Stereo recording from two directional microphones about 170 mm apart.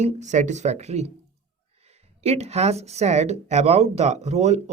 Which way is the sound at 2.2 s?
40° right (ahead or behind).